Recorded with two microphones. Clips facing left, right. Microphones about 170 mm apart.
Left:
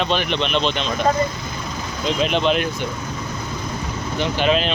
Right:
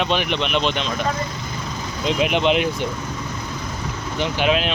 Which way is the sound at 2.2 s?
15° right (ahead or behind).